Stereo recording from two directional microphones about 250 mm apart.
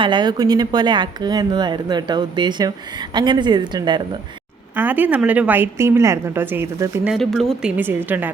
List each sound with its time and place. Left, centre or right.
0.0 s a woman's voice: centre
4.8 s a woman's voice: centre